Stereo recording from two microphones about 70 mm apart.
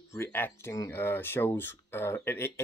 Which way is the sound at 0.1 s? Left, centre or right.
Left.